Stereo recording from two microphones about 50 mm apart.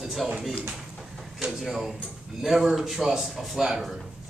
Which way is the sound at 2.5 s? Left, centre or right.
Centre.